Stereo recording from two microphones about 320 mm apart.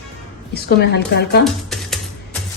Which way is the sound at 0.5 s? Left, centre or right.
Left.